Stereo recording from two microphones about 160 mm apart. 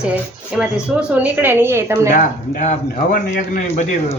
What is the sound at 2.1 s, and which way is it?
A man's voice, 50° left (ahead or behind).